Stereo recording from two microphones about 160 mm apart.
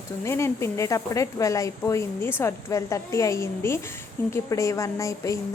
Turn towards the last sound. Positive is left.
turn(degrees=20)  # may be behind; listen again after turning